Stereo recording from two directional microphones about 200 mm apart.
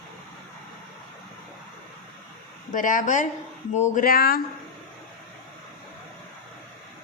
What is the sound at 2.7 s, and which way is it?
Speech, 40° left (ahead or behind).